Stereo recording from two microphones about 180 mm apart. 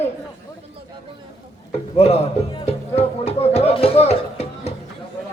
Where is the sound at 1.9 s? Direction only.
35° left (ahead or behind).